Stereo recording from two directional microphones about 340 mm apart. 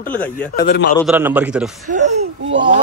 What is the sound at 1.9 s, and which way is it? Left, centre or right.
Male singing, right.